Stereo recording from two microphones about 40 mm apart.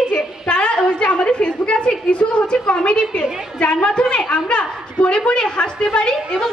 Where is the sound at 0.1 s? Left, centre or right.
Left.